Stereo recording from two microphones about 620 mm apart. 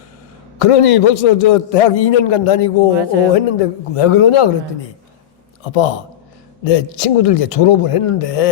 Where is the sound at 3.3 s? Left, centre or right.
Left.